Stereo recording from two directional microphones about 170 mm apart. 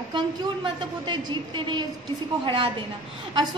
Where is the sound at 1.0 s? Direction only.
25° right (ahead or behind).